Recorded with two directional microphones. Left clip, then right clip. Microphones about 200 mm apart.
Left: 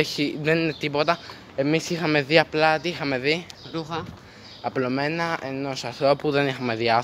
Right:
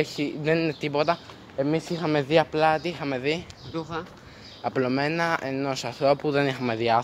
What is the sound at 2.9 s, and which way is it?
Speech, 15° left (ahead or behind).